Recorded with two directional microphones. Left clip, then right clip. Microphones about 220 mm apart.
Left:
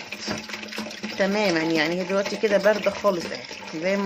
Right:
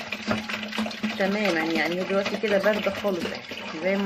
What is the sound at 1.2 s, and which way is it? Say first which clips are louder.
Speech: left 3 dB; 40° left (ahead or behind).